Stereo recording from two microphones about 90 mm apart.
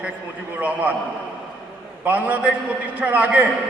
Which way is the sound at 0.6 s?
15° right (ahead or behind).